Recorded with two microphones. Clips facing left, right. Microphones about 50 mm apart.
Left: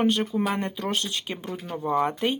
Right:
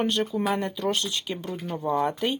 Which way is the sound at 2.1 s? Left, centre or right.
Left.